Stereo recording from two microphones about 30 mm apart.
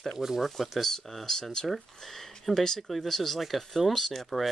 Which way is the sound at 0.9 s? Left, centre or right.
Centre.